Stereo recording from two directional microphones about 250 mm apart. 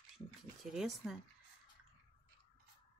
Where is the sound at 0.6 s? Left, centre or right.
Centre.